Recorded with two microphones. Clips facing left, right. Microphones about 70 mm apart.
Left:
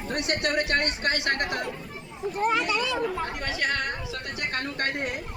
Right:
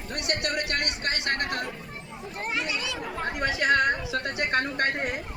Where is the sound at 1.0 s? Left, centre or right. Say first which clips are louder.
Left 3 dB; right.